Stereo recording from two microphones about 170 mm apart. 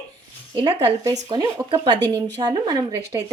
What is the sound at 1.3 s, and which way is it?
Speech, 25° right (ahead or behind).